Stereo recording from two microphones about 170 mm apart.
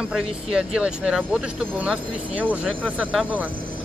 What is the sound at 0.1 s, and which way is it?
Speech, 5° right (ahead or behind).